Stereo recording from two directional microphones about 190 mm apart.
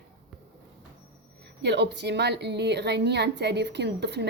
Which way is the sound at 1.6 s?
65° right (ahead or behind).